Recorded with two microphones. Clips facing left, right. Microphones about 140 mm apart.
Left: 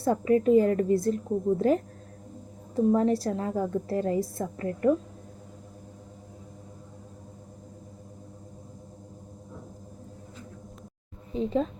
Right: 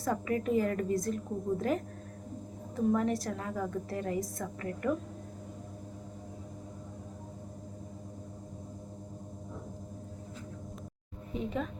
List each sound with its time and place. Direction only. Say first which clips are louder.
0.0 s a woman's voice: left 9 dB; 30° left (ahead or behind)
11.3 s a woman's voice: left 8 dB; 30° left (ahead or behind)